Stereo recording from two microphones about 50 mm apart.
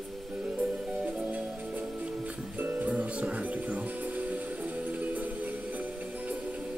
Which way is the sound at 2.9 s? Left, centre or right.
Right.